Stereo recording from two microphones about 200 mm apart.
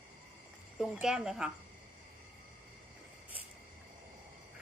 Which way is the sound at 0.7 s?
Centre (ahead or behind).